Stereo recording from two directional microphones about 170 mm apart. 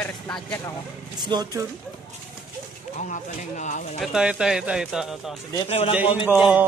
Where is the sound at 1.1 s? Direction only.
25° right (ahead or behind).